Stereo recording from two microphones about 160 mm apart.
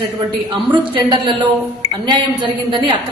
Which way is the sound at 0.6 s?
30° right (ahead or behind).